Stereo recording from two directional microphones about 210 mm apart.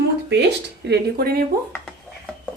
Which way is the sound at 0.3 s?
50° right (ahead or behind).